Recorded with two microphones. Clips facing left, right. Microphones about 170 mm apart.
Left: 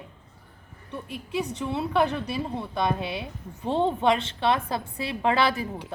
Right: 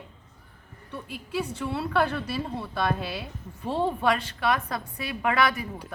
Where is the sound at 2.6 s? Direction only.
20° left (ahead or behind).